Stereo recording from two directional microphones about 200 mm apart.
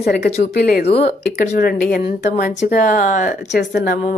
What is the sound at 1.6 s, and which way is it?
A woman's voice, 45° left (ahead or behind).